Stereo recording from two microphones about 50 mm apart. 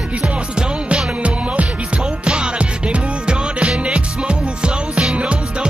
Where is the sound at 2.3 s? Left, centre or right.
Right.